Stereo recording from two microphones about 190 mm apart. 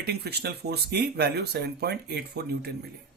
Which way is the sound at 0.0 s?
55° right (ahead or behind).